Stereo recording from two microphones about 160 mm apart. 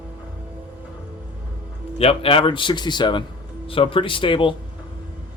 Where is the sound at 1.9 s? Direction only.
35° left (ahead or behind).